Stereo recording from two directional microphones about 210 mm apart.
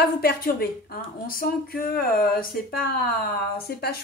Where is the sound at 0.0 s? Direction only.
45° left (ahead or behind).